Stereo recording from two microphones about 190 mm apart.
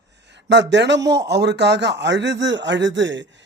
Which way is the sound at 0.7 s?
65° right (ahead or behind).